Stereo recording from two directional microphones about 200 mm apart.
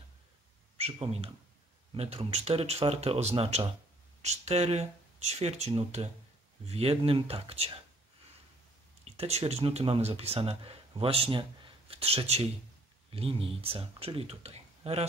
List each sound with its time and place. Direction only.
0.7 s speech: 30° right (ahead or behind)
9.0 s speech: 30° right (ahead or behind)